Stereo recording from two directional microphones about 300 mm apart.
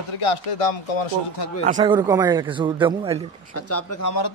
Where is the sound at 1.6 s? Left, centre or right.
Right.